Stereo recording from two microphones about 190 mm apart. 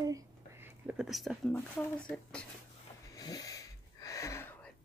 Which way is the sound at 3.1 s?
20° left (ahead or behind).